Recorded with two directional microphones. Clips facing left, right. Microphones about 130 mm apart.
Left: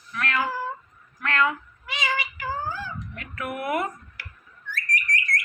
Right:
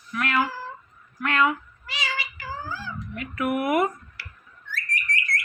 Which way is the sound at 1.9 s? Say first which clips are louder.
Left 4 dB; 55° left (ahead or behind).